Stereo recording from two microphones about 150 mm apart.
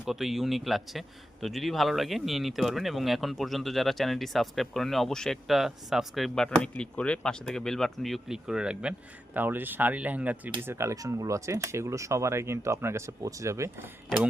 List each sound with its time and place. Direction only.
0.0 s a man's voice: centre (ahead or behind); by 13.9 s 20° right (ahead or behind)